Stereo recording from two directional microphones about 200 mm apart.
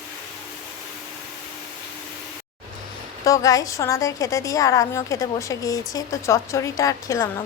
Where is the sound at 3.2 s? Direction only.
15° left (ahead or behind).